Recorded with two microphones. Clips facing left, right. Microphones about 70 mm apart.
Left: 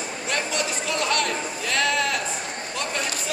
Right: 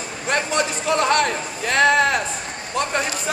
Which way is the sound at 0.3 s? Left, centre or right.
Right.